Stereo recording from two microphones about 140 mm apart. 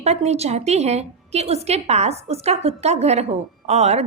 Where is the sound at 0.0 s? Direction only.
50° right (ahead or behind).